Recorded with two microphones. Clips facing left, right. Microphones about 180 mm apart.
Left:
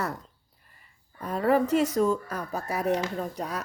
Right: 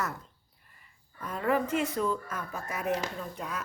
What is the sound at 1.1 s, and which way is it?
Speech, 35° left (ahead or behind).